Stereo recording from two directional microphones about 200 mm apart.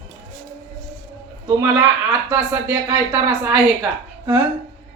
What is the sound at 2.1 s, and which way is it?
A woman's voice, 10° right (ahead or behind).